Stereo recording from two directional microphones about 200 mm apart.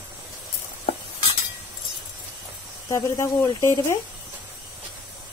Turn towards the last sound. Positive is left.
turn(degrees=15)  # may be behind; listen again after turning